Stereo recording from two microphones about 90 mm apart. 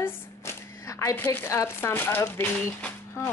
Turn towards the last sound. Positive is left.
turn(degrees=25)  # may be behind; listen again after turning